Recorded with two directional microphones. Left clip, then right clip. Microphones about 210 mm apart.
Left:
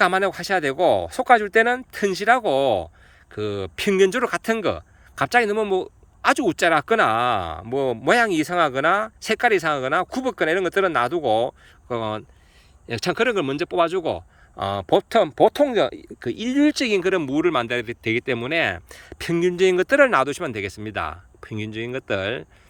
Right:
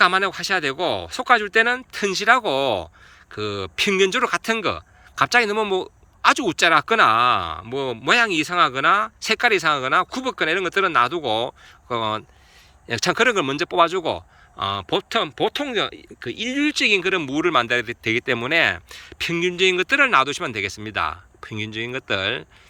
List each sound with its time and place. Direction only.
0.0 s speech: 20° left (ahead or behind)